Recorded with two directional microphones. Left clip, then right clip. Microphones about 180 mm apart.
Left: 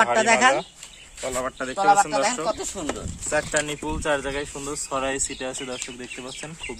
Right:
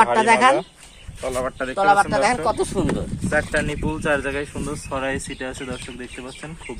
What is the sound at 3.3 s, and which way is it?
Speech, 15° left (ahead or behind).